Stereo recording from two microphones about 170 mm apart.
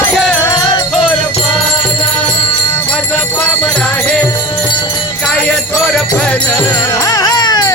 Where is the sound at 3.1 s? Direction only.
10° left (ahead or behind).